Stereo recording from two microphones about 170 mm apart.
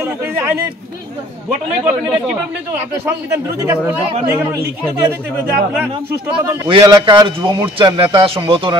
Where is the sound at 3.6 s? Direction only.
10° right (ahead or behind).